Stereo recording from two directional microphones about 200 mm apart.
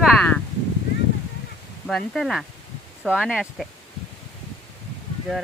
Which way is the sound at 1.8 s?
Centre (ahead or behind).